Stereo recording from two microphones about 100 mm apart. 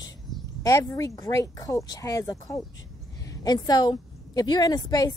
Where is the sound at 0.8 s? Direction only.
40° left (ahead or behind).